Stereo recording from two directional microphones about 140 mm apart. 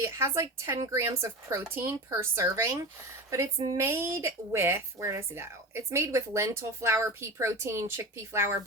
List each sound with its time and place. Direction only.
0.0 s speech: 20° right (ahead or behind)